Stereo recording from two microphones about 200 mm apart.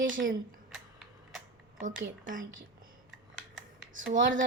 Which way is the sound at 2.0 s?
40° right (ahead or behind).